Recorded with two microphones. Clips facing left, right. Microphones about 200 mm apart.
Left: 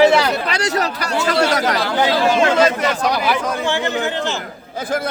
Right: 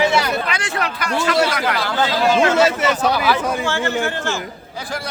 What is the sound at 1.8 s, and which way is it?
Speech, 15° left (ahead or behind).